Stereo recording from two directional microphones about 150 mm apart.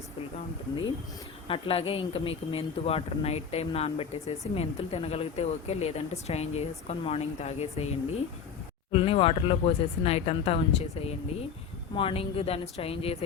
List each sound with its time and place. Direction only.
1.5 s speech: 35° left (ahead or behind)